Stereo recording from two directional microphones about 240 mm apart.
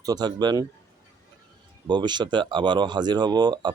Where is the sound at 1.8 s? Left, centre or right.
Centre.